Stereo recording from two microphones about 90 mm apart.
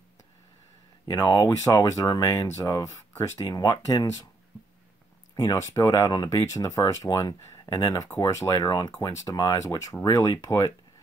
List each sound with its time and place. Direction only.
1.0 s speech: 50° left (ahead or behind)
2.4 s speech: 35° left (ahead or behind)
5.3 s speech: 35° left (ahead or behind)